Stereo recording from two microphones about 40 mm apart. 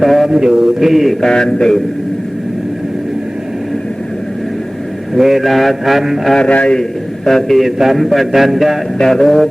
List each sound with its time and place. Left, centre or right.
0.0 s mantra: centre
0.3 s mantra: centre
1.2 s a man's voice: centre
5.1 s mantra: centre
6.5 s a man's voice: left
7.3 s a man's voice: centre
7.8 s mantra: centre
9.0 s a man's voice: centre